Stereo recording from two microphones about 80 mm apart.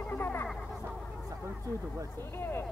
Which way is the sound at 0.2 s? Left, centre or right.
Left.